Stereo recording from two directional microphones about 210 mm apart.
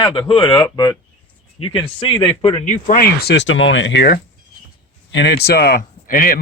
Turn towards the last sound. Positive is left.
turn(degrees=40)  # may be behind; listen again after turning